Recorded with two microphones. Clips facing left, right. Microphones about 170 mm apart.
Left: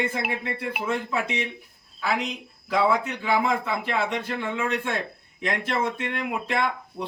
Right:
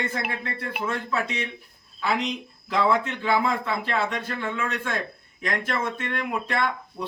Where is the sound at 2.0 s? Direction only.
5° left (ahead or behind).